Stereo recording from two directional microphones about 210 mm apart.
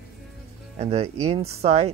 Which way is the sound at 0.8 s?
30° right (ahead or behind).